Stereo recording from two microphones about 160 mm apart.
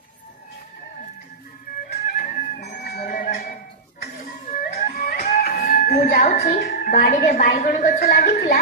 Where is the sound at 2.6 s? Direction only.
75° left (ahead or behind).